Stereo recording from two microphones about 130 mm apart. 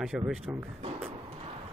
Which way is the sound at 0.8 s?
45° right (ahead or behind).